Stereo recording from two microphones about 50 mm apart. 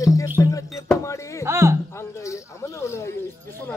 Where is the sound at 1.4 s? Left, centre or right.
Right.